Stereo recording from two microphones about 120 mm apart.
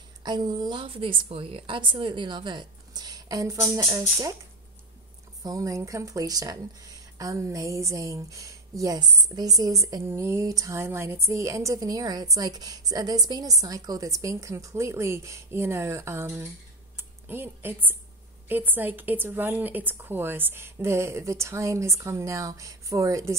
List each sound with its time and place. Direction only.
0.2 s a woman's voice: 35° right (ahead or behind)
5.4 s a woman's voice: 30° right (ahead or behind)